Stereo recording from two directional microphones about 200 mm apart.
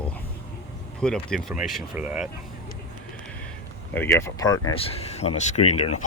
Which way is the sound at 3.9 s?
10° left (ahead or behind).